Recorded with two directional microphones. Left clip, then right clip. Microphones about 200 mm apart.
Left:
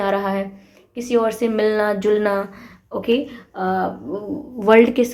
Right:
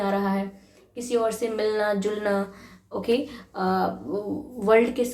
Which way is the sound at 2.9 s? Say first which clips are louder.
Left 5 dB; 25° left (ahead or behind).